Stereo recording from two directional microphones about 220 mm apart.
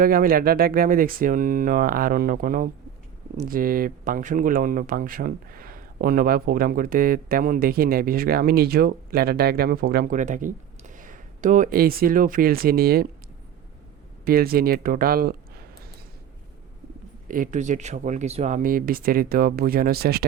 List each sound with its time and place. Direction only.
0.0 s speech: 40° right (ahead or behind)
14.3 s speech: 40° right (ahead or behind)
17.2 s speech: 35° right (ahead or behind)